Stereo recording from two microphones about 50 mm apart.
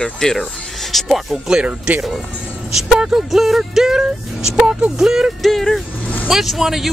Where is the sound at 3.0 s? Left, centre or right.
Centre.